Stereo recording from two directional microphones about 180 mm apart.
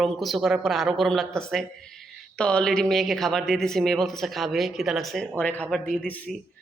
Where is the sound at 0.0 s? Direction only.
Centre (ahead or behind).